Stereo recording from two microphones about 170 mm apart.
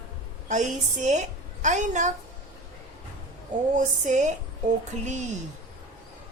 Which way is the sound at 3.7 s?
45° right (ahead or behind).